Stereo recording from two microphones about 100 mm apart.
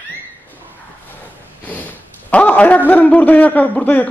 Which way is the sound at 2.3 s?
15° left (ahead or behind).